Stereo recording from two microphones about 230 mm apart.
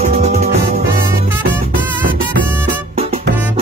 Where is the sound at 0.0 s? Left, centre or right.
Right.